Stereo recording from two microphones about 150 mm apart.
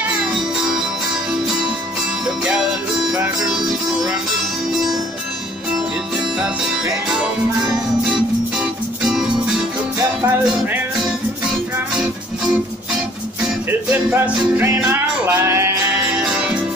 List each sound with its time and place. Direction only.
8.5 s music: 5° right (ahead or behind)
13.7 s music: 10° right (ahead or behind)
16.2 s music: 5° right (ahead or behind)